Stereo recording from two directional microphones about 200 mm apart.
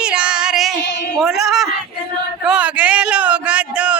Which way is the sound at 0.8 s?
60° left (ahead or behind).